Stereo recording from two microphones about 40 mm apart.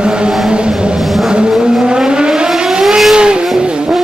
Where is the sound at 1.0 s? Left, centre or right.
Centre.